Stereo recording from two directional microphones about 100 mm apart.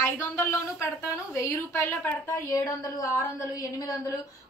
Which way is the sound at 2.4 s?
35° left (ahead or behind).